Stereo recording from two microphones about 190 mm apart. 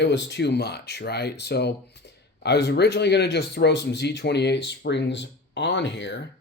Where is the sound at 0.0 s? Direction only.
65° left (ahead or behind).